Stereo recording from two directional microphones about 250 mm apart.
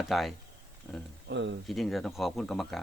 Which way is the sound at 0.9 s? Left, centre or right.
Centre.